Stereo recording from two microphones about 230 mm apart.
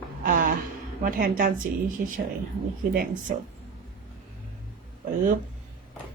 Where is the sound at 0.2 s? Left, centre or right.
Right.